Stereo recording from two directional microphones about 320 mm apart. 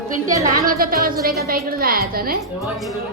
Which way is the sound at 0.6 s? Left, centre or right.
Right.